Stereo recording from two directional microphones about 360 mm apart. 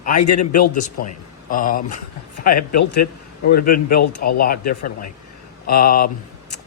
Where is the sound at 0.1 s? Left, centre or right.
Left.